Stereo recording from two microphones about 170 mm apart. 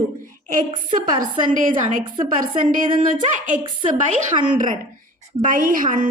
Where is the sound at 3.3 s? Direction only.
50° right (ahead or behind).